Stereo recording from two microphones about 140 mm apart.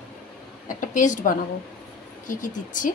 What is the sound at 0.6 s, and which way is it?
Speech, 65° left (ahead or behind).